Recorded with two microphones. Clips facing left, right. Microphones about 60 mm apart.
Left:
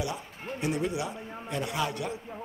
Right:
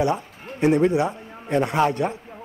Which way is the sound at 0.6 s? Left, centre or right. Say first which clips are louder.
Right 12 dB; right.